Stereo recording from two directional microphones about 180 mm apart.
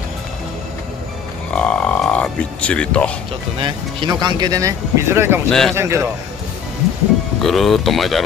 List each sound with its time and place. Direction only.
1.5 s a sound: 5° left (ahead or behind)
3.5 s speech: 25° right (ahead or behind)
5.5 s speech: centre (ahead or behind)
5.8 s a man's voice: 15° right (ahead or behind)
7.4 s speech: centre (ahead or behind)